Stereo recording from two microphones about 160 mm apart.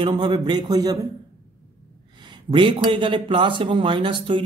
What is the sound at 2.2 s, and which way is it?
Speech, 30° right (ahead or behind).